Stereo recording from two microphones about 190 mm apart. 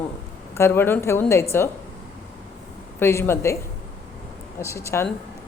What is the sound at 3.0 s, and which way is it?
Speech, 15° left (ahead or behind).